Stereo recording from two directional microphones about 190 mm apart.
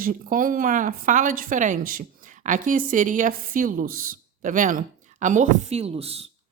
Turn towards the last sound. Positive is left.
turn(degrees=-30)  # may be behind; listen again after turning